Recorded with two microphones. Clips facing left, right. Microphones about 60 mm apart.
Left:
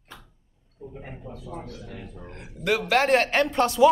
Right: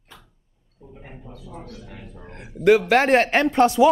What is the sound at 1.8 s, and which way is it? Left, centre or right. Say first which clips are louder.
Speech: left 1 dB; centre.